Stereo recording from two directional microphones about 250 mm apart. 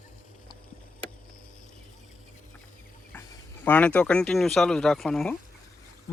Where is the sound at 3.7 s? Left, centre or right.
Centre.